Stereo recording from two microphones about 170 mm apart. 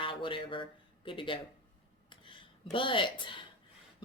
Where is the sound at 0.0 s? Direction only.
30° left (ahead or behind).